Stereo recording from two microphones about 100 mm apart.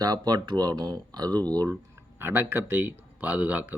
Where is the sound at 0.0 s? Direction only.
40° right (ahead or behind).